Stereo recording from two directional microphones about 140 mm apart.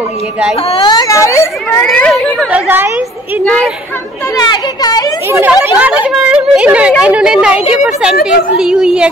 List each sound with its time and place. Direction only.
0.8 s speech: 25° left (ahead or behind)
1.8 s a woman's voice: 5° left (ahead or behind)
2.5 s a woman's voice: 15° right (ahead or behind)
3.4 s a woman's voice: 5° left (ahead or behind)
4.4 s speech: 30° left (ahead or behind)
5.7 s a woman's voice: 10° right (ahead or behind)